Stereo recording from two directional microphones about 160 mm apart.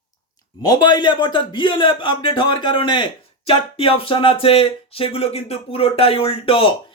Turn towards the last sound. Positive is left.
turn(degrees=35)  # may be behind; listen again after turning